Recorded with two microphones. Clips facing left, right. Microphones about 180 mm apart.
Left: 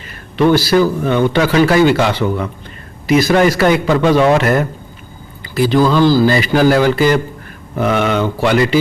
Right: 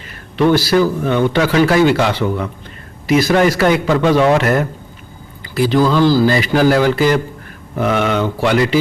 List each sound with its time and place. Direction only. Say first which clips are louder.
0.4 s speech: left 1 dB; 20° left (ahead or behind)
5.8 s speech: left 1 dB; 25° left (ahead or behind)